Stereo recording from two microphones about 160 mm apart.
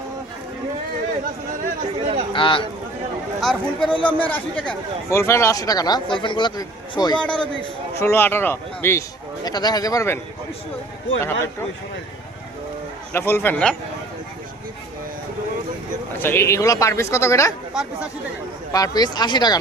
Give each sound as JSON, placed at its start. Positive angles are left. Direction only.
{"t": 2.0, "sound": "speech", "side_deg": -40}
{"t": 2.3, "sound": "a man's voice", "side_deg": 30}
{"t": 3.4, "sound": "a man's voice", "side_deg": 5}
{"t": 7.2, "sound": "a man's voice", "side_deg": 5}
{"t": 13.1, "sound": "speech", "side_deg": 15}
{"t": 16.1, "sound": "speech", "side_deg": 15}
{"t": 18.7, "sound": "a man's voice", "side_deg": 25}